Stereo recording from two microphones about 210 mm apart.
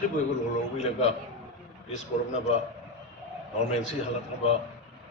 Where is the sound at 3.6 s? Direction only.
35° left (ahead or behind).